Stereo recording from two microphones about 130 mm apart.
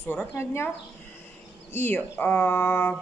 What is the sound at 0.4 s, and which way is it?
Speech, 20° left (ahead or behind).